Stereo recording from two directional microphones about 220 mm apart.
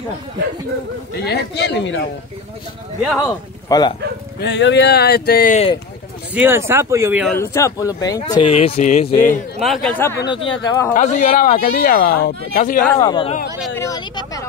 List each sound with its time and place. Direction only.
1.2 s speech: 50° left (ahead or behind)
3.2 s speech: 15° left (ahead or behind)
4.4 s speech: 55° left (ahead or behind)
6.3 s speech: 10° right (ahead or behind)
7.2 s speech: 10° left (ahead or behind); by 9.1 s 30° left (ahead or behind)
9.6 s speech: centre (ahead or behind); by 10.9 s 15° left (ahead or behind)
10.9 s speech: 35° left (ahead or behind)
12.8 s speech: 15° left (ahead or behind)
13.7 s vehicle: 15° left (ahead or behind)